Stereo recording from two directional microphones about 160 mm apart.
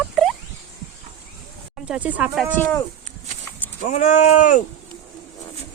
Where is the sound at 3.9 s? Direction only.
45° left (ahead or behind).